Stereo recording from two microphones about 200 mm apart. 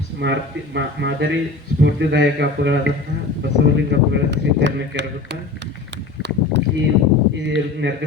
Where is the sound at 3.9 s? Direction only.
60° right (ahead or behind).